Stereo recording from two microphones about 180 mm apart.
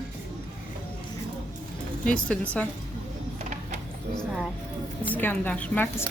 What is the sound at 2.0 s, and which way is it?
Speech, 5° left (ahead or behind).